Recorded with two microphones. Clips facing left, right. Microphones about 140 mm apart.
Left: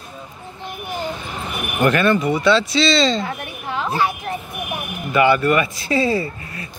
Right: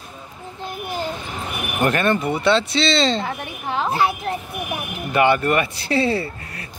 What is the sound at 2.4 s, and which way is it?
Speech, 60° right (ahead or behind).